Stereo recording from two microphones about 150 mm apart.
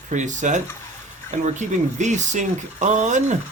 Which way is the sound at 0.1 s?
55° right (ahead or behind).